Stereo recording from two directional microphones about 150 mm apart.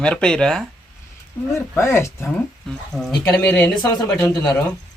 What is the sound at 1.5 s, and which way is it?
Speech, 20° left (ahead or behind).